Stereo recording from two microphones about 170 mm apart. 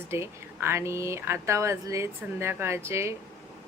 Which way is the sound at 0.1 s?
15° right (ahead or behind).